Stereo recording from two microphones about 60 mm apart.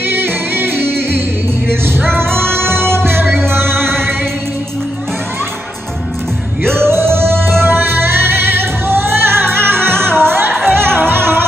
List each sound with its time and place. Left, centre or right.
0.1 s music: right
6.6 s music: right